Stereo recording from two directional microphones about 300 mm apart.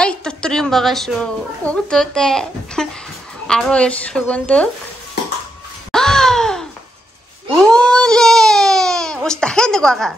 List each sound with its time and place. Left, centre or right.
0.0 s a woman's voice: centre
5.9 s a sound: centre
7.6 s baby cry: centre